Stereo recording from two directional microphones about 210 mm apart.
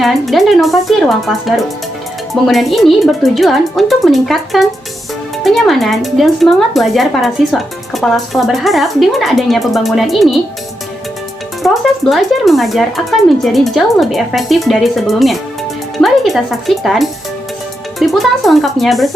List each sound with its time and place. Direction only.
0.0 s speech: centre (ahead or behind)
11.6 s speech: centre (ahead or behind)